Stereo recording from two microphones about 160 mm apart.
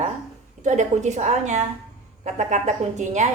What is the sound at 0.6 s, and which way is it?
A woman's voice, 50° right (ahead or behind).